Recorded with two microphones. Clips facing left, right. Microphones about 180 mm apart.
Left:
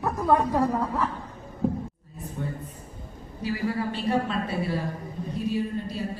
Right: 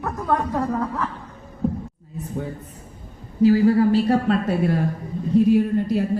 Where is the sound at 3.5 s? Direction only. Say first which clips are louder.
Right 12 dB; 35° right (ahead or behind).